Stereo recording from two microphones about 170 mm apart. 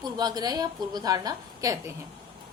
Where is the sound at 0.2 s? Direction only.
25° right (ahead or behind).